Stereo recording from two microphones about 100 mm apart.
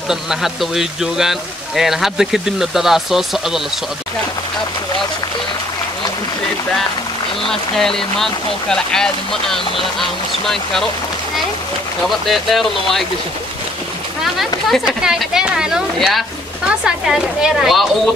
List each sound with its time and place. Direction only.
0.1 s speech: 5° right (ahead or behind)
7.4 s speech: 5° left (ahead or behind)
12.3 s speech: centre (ahead or behind)
15.0 s speech: 5° right (ahead or behind)